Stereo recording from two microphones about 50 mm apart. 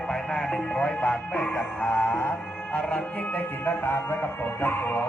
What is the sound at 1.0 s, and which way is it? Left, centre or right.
Music, left.